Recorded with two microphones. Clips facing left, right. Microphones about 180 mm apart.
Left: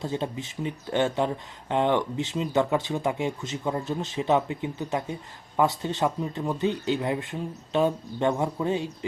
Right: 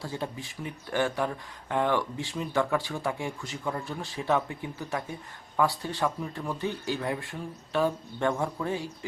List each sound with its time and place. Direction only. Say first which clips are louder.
0.0 s speech: left 5 dB; 20° left (ahead or behind)